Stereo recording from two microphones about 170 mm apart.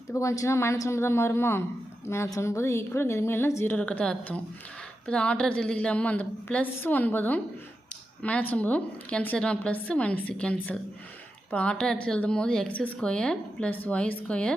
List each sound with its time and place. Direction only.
0.1 s speech: 15° left (ahead or behind)